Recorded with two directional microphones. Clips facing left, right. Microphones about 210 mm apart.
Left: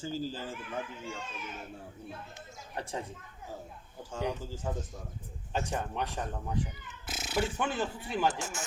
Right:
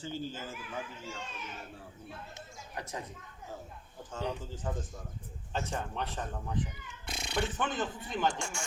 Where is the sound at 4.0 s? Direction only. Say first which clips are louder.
Left 2 dB; 10° left (ahead or behind).